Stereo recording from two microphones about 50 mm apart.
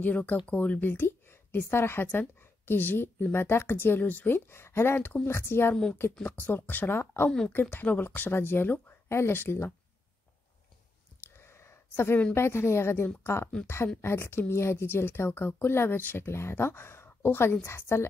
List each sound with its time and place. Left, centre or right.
0.0 s speech: left
4.5 s a woman's voice: left
6.2 s speech: left
7.2 s speech: centre
7.8 s speech: left
11.1 s a sound: left
12.4 s a woman's voice: left